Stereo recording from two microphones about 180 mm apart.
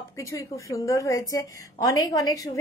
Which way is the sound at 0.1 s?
15° left (ahead or behind).